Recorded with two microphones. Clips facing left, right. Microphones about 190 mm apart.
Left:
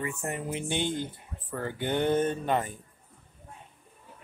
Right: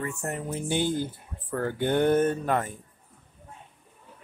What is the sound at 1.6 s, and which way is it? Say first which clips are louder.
Speech: right 4 dB; 15° left (ahead or behind).